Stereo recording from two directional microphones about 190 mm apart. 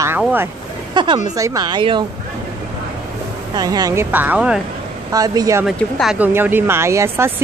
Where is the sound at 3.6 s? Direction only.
20° right (ahead or behind).